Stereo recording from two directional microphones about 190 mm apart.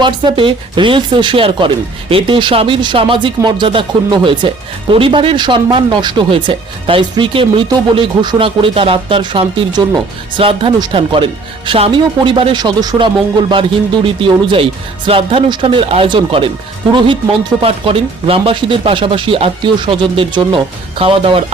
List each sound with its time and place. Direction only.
0.0 s speech: 25° right (ahead or behind)
17.6 s speech: 30° right (ahead or behind)